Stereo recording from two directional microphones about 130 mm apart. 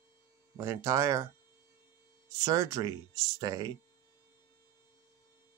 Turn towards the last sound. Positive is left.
turn(degrees=-30)  # may be behind; listen again after turning